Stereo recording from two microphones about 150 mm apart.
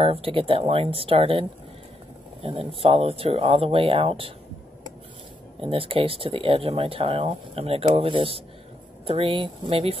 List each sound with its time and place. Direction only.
0.0 s speech: 40° right (ahead or behind)
2.4 s speech: 35° right (ahead or behind)
5.6 s speech: 35° right (ahead or behind)